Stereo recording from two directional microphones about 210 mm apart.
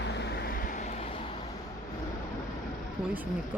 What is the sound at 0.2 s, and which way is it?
Vehicle, 50° left (ahead or behind).